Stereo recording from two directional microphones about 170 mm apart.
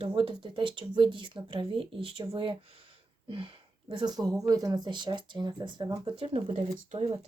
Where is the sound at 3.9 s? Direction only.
25° right (ahead or behind).